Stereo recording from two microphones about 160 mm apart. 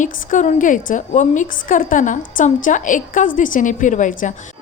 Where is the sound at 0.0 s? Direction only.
50° left (ahead or behind).